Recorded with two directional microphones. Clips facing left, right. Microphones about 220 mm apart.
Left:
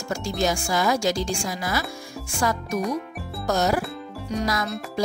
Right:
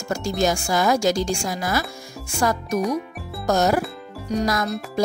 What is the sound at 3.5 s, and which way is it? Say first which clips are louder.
Speech: right 3 dB; 45° right (ahead or behind).